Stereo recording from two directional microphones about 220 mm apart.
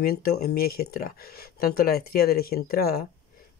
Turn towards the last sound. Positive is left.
turn(degrees=45)  # may be behind; listen again after turning